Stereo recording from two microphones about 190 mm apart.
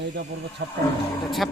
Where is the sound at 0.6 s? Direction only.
65° right (ahead or behind).